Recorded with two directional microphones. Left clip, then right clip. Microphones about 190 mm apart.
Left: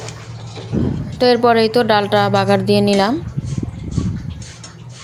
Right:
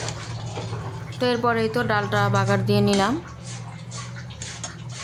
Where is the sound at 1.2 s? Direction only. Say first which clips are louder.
Left 9 dB; 25° left (ahead or behind).